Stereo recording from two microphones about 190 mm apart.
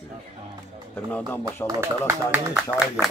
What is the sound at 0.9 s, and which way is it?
Speech, 10° left (ahead or behind).